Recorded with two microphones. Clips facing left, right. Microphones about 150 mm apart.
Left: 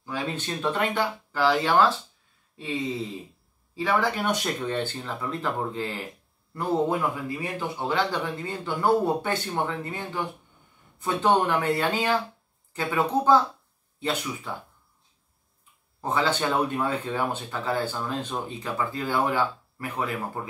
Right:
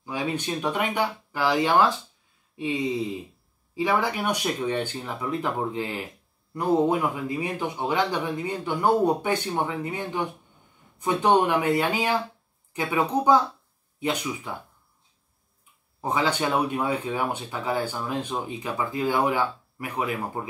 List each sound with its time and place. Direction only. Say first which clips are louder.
0.0 s speech: right 2 dB; 15° right (ahead or behind)
16.0 s speech: even; 15° right (ahead or behind)